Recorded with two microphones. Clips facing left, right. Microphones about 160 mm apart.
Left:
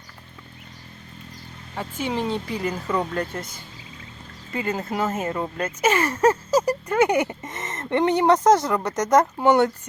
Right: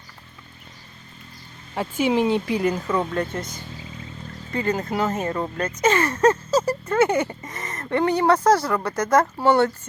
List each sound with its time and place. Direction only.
1.7 s speech: 15° right (ahead or behind)
2.1 s speech: 5° right (ahead or behind)
4.5 s speech: 5° left (ahead or behind)